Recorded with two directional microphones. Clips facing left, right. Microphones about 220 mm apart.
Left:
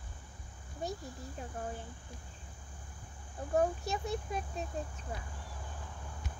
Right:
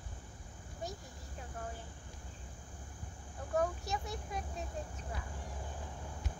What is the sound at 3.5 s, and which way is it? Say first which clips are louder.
Speech: left 3 dB; 25° left (ahead or behind).